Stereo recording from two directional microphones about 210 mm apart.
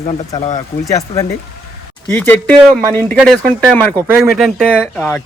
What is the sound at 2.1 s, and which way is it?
Speech, 5° left (ahead or behind).